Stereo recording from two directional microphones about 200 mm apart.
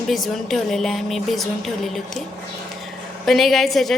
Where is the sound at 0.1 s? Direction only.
Centre (ahead or behind).